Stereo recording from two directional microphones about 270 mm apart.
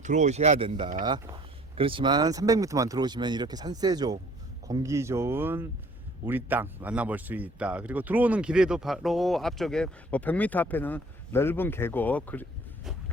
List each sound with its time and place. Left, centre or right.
0.0 s speech: right
1.0 s speech: centre